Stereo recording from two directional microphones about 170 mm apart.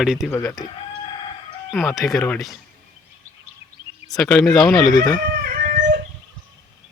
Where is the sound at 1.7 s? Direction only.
5° right (ahead or behind).